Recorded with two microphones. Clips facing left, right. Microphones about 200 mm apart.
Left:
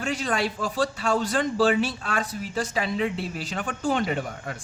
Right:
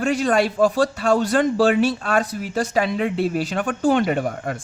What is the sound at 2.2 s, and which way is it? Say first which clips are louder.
Speech: right 5 dB; 65° right (ahead or behind).